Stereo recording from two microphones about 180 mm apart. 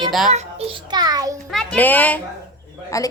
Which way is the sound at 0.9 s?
20° right (ahead or behind).